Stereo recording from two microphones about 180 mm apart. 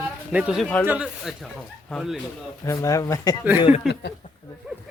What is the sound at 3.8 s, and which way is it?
Speech, centre (ahead or behind).